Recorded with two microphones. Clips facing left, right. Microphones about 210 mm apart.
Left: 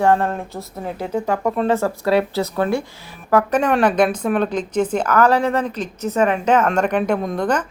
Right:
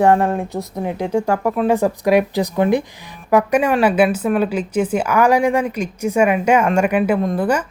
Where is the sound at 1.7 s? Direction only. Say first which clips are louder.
Right 4 dB; 15° right (ahead or behind).